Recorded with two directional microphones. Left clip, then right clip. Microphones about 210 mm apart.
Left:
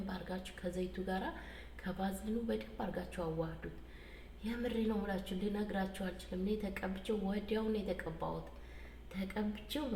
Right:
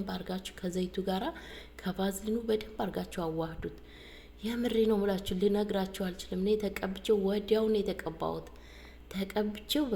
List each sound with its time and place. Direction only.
0.0 s a woman's voice: 50° right (ahead or behind)
4.4 s a woman's voice: 55° right (ahead or behind)
9.1 s a woman's voice: 55° right (ahead or behind)